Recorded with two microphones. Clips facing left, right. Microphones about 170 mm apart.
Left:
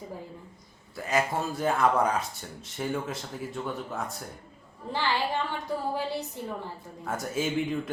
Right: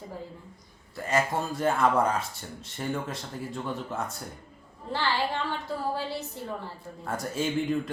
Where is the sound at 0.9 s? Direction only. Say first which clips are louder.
Right 1 dB; centre (ahead or behind).